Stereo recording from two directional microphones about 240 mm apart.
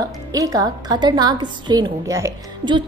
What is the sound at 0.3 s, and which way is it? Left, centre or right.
A woman's voice, centre.